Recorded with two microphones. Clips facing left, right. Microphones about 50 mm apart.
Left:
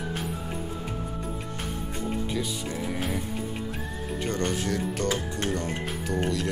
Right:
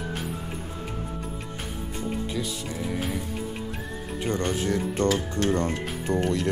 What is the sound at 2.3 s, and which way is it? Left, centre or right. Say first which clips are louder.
Music: even; centre.